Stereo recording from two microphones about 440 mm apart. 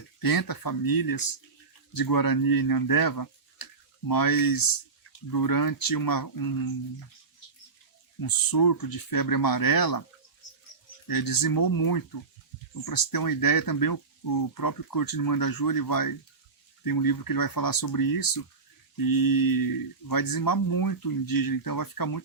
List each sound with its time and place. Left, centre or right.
0.2 s speech: left
8.2 s speech: left
11.1 s speech: left